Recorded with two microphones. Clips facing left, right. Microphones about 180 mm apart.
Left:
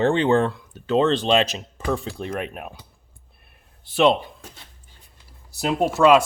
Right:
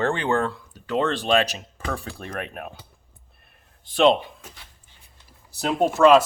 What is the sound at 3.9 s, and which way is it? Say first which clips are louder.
Speech: even; 5° left (ahead or behind).